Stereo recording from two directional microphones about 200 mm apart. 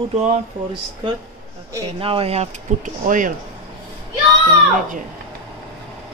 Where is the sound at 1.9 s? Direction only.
30° right (ahead or behind).